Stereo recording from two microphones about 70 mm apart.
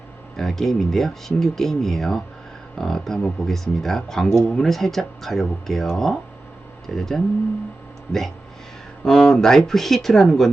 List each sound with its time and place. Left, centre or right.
0.3 s speech: centre
9.0 s speech: centre